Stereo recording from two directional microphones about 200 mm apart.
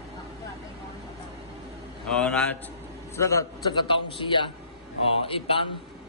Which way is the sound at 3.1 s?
15° left (ahead or behind).